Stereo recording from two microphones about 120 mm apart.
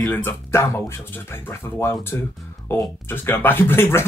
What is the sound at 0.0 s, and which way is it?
Speech, 20° left (ahead or behind).